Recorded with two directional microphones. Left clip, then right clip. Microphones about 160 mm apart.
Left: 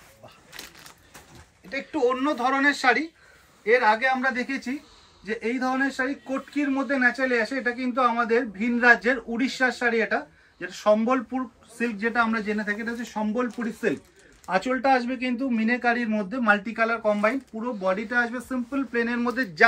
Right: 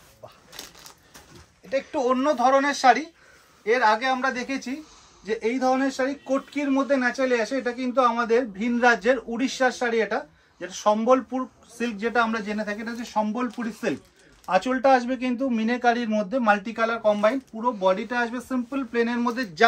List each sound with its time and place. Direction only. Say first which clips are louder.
1.7 s a man's voice: right 1 dB; 50° right (ahead or behind)
5.2 s a man's voice: right 3 dB; 30° right (ahead or behind)
14.7 s a man's voice: right 2 dB; 40° right (ahead or behind)